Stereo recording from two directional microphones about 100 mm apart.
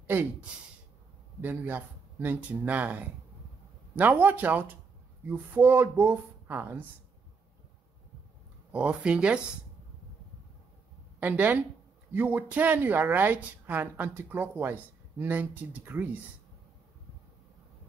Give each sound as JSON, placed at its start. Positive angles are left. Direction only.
{"t": 0.0, "sound": "speech", "side_deg": -20}
{"t": 8.7, "sound": "speech", "side_deg": -10}
{"t": 11.1, "sound": "a woman's voice", "side_deg": -15}